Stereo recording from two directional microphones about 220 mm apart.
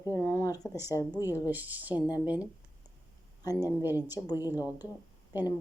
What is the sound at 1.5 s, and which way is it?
Speech, 10° right (ahead or behind).